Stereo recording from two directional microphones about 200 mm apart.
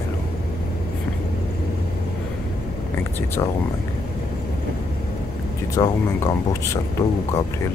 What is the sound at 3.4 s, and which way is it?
Speech, 20° left (ahead or behind).